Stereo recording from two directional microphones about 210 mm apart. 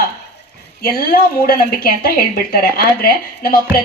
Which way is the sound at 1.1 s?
45° left (ahead or behind).